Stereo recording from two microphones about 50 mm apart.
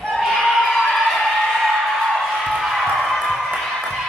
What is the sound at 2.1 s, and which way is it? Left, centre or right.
Music, centre.